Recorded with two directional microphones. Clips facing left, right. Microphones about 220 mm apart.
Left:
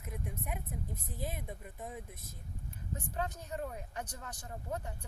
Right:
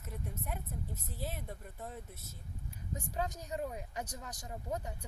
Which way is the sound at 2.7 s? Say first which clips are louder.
Even; 10° right (ahead or behind).